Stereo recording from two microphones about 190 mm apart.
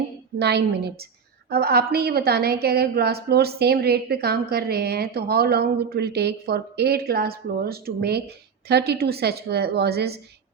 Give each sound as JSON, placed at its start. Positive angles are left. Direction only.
{"t": 0.3, "sound": "a woman's voice", "side_deg": -60}